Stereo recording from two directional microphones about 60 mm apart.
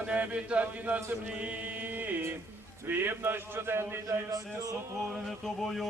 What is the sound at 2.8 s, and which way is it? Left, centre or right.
A man's voice, right.